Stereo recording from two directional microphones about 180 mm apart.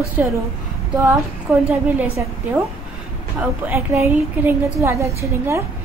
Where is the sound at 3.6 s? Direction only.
10° right (ahead or behind).